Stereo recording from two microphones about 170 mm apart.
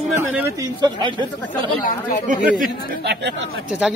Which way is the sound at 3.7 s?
5° right (ahead or behind).